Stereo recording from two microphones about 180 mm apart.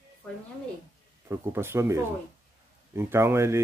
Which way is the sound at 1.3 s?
15° right (ahead or behind).